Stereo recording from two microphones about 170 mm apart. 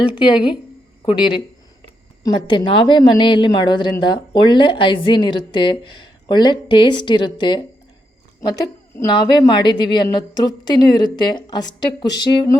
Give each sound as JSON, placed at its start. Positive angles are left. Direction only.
{"t": 0.2, "sound": "a woman's voice", "side_deg": 25}